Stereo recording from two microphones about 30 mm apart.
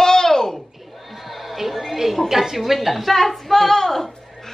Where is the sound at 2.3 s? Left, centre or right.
Centre.